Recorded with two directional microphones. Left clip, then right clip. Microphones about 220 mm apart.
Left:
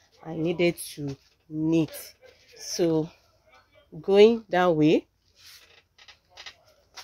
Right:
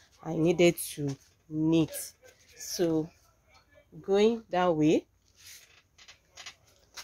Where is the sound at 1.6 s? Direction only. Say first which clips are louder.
Left 2 dB; 5° right (ahead or behind).